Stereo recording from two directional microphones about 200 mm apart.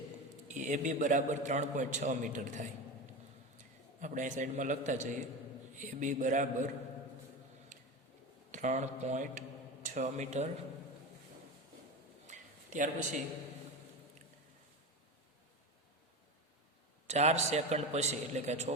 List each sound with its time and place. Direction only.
0.4 s a man's voice: 40° right (ahead or behind)
8.5 s a man's voice: 35° right (ahead or behind)
12.3 s a sound: 40° right (ahead or behind)
17.1 s a man's voice: 35° right (ahead or behind)